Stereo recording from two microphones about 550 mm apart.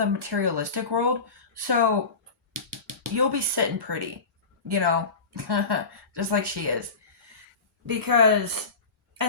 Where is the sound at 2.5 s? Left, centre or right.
Right.